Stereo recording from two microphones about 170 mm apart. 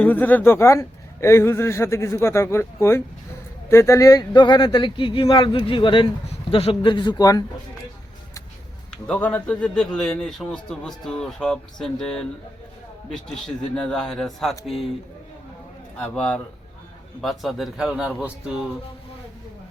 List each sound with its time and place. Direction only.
0.0 s a man's voice: 10° left (ahead or behind)
9.0 s speech: 10° left (ahead or behind)
16.0 s a man's voice: 10° left (ahead or behind)